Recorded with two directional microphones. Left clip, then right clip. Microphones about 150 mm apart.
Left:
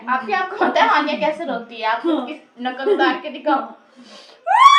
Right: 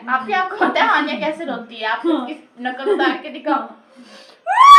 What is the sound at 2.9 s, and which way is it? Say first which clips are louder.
Speech: left 2 dB; 20° left (ahead or behind).